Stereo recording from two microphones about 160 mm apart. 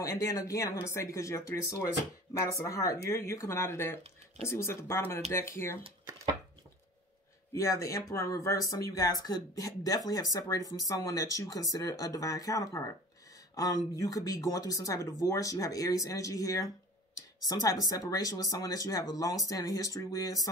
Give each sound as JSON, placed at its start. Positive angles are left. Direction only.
{"t": 0.0, "sound": "speech", "side_deg": 20}
{"t": 7.5, "sound": "speech", "side_deg": 20}